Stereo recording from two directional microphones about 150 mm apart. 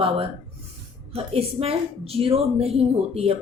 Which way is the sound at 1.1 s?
40° right (ahead or behind).